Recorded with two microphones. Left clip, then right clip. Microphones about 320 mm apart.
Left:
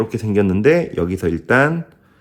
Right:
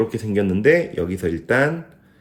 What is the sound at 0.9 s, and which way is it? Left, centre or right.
Speech, centre.